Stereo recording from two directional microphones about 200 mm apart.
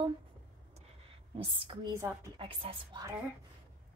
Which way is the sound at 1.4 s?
25° right (ahead or behind).